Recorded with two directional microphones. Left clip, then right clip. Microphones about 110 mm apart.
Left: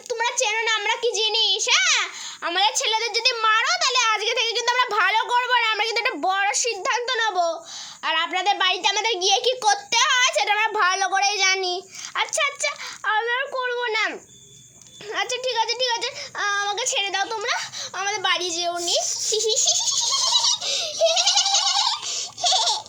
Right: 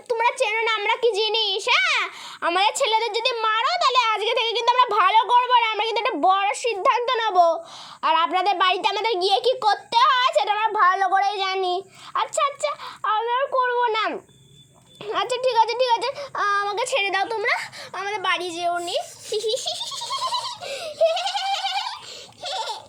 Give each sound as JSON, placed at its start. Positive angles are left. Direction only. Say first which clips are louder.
{"t": 0.1, "sound": "a sound", "louder": "right 2 dB", "side_deg": -50}
{"t": 8.0, "sound": "a child's voice", "louder": "right 2 dB", "side_deg": -45}
{"t": 9.6, "sound": "a woman's voice", "louder": "right 2 dB", "side_deg": -10}
{"t": 10.6, "sound": "speech", "louder": "right 2 dB", "side_deg": 0}
{"t": 11.5, "sound": "a child's voice", "louder": "right 1 dB", "side_deg": -15}
{"t": 16.8, "sound": "speech", "louder": "right 2 dB", "side_deg": -50}
{"t": 17.9, "sound": "a child's voice", "louder": "left 1 dB", "side_deg": -40}
{"t": 21.2, "sound": "goat", "louder": "left 5 dB", "side_deg": -20}
{"t": 21.8, "sound": "baby laughter", "louder": "left 8 dB", "side_deg": 90}